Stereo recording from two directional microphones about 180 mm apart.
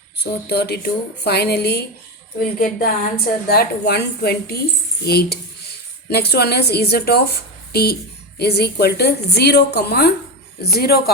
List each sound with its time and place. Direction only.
0.2 s a woman's voice: 65° left (ahead or behind)
2.6 s a woman's voice: 50° left (ahead or behind)
3.5 s a woman's voice: 60° left (ahead or behind)